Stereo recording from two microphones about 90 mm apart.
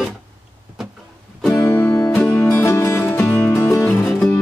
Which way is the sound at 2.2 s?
10° left (ahead or behind).